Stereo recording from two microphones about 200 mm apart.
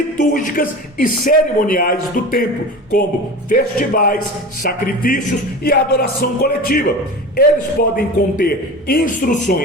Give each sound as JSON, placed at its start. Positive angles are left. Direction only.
{"t": 0.2, "sound": "speech", "side_deg": 40}
{"t": 3.5, "sound": "speech", "side_deg": 45}